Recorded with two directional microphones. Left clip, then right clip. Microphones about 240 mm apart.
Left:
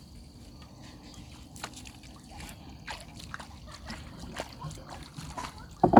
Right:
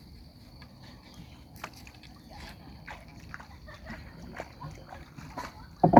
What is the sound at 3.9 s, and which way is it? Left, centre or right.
Boat, left.